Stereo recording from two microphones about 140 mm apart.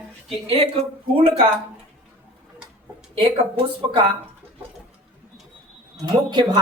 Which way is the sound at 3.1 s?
40° right (ahead or behind).